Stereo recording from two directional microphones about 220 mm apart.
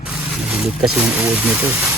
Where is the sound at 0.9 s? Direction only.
5° right (ahead or behind).